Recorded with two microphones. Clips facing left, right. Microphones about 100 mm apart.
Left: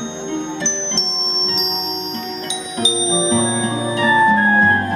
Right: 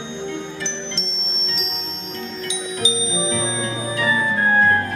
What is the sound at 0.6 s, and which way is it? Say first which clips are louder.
Music: left 4 dB; 20° left (ahead or behind).